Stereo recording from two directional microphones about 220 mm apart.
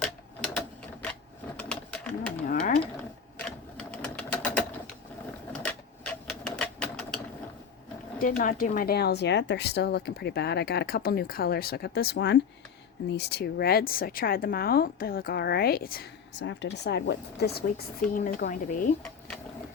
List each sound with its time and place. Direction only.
0.0 s sewing machine: 5° left (ahead or behind)
1.5 s bird: 5° left (ahead or behind)
2.5 s a sound: 40° left (ahead or behind)
3.3 s sewing machine: 5° left (ahead or behind)
8.4 s speech: 40° left (ahead or behind)